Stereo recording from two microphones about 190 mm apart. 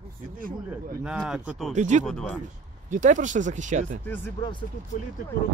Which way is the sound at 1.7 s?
40° right (ahead or behind).